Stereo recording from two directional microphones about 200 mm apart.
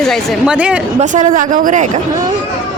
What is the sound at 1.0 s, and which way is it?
A man's voice, 40° right (ahead or behind).